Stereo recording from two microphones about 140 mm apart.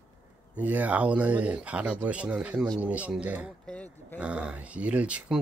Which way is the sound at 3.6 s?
10° left (ahead or behind).